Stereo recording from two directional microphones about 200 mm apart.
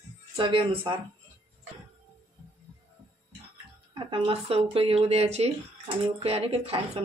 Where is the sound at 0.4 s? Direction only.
25° right (ahead or behind).